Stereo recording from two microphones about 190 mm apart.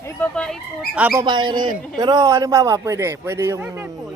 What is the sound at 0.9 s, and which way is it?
Speech, 10° right (ahead or behind).